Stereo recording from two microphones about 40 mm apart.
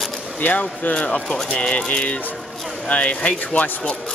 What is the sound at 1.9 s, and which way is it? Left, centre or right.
Speech, left.